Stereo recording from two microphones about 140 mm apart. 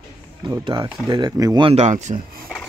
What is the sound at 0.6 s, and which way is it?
Speech, 35° right (ahead or behind).